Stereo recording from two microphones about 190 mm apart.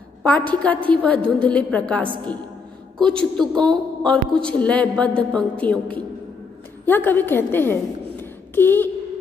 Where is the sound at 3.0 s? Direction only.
5° left (ahead or behind).